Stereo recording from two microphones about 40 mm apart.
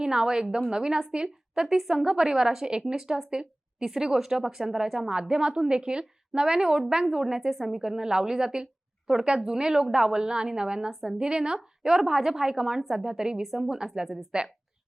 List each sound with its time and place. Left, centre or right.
0.0 s a woman's voice: centre
1.7 s a woman's voice: centre
7.8 s speech: centre
12.8 s a woman's voice: centre
13.1 s a woman's voice: centre